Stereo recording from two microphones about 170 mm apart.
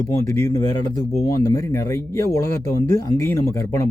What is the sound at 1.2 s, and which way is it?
Speech, 20° left (ahead or behind).